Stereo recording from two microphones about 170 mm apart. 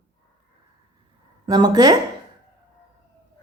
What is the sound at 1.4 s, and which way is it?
Speech, 25° right (ahead or behind).